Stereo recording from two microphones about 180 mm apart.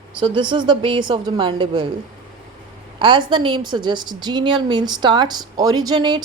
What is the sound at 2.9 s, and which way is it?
A woman's voice, 25° right (ahead or behind).